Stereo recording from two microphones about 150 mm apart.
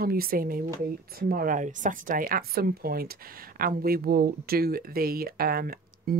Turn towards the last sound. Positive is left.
turn(degrees=-80)